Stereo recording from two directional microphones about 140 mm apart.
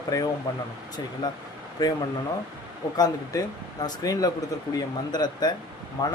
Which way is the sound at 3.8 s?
25° left (ahead or behind).